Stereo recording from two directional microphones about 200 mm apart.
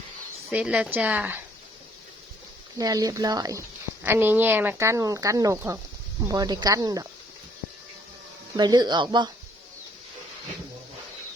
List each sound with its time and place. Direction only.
0.5 s speech: 5° right (ahead or behind)
2.7 s speech: 20° right (ahead or behind)
8.5 s speech: 20° right (ahead or behind)